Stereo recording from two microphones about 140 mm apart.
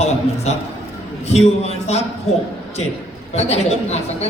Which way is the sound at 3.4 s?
50° left (ahead or behind).